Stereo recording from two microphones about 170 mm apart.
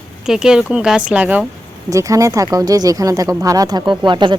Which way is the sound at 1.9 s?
20° right (ahead or behind).